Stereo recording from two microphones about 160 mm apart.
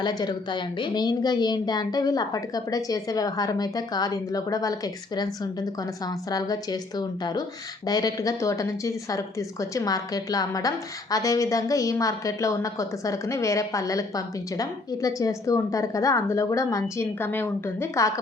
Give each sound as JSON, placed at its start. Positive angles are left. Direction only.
{"t": 0.0, "sound": "a woman's voice", "side_deg": 25}